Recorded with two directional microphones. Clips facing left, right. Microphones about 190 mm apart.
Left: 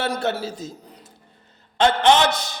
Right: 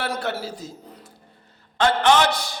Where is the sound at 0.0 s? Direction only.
25° left (ahead or behind).